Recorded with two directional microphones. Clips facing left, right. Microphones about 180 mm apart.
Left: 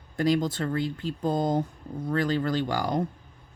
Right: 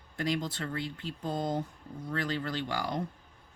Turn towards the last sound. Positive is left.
turn(degrees=40)  # may be behind; listen again after turning